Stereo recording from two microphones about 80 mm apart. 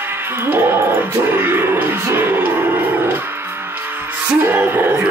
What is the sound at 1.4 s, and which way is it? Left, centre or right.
Music, right.